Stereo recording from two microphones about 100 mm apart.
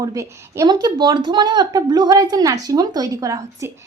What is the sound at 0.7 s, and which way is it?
Speech, 45° right (ahead or behind).